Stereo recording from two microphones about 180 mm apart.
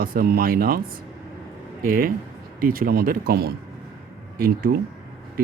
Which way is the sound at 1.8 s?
50° right (ahead or behind).